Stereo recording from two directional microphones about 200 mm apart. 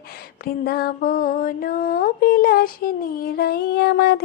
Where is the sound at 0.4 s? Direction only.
50° left (ahead or behind).